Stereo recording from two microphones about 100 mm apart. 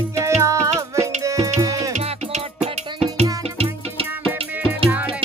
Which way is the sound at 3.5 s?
70° right (ahead or behind).